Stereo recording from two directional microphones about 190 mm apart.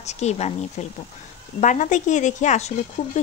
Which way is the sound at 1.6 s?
40° left (ahead or behind).